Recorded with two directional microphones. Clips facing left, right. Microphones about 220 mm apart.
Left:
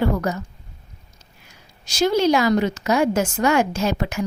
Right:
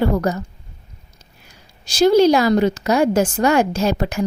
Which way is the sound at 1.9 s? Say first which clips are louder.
Right 5 dB; 35° right (ahead or behind).